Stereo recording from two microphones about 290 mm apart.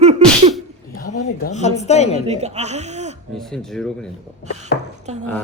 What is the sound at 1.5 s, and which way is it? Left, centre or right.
Speech, left.